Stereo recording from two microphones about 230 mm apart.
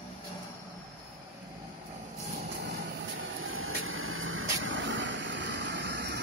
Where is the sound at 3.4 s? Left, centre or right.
Right.